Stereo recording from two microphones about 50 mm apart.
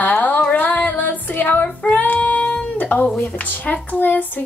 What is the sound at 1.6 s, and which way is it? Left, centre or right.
Child singing, left.